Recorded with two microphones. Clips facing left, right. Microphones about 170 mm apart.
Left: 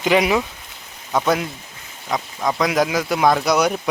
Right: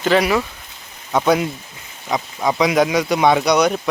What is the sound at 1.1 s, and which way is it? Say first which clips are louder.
Speech: right 3 dB; centre (ahead or behind).